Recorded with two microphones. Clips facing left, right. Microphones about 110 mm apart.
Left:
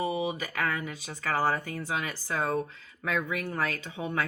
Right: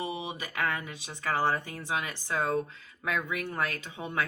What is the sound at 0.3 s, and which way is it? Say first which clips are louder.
Speech: left 1 dB; 20° right (ahead or behind).